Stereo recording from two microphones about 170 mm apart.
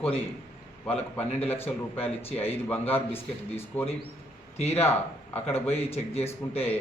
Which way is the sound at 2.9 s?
15° left (ahead or behind).